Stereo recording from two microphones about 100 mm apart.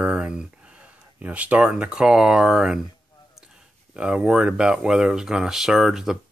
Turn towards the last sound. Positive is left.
turn(degrees=-5)  # may be behind; listen again after turning